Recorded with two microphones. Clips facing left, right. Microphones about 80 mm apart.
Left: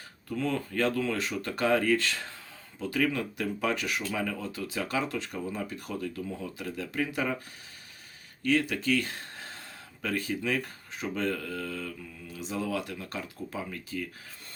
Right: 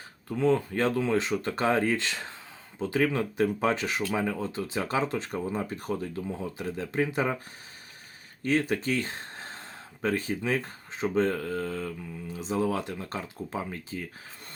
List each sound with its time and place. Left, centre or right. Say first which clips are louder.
0.3 s speech: right 6 dB; right
8.4 s speech: right 1 dB; right